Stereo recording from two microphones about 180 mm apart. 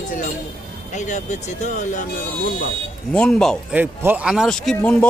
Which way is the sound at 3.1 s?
5° left (ahead or behind).